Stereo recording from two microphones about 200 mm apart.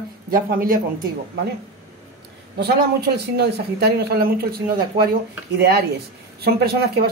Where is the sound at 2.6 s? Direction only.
55° right (ahead or behind).